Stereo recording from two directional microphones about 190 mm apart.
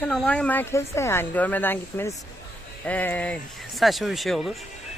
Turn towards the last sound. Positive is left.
turn(degrees=0)  # may be behind; listen again after turning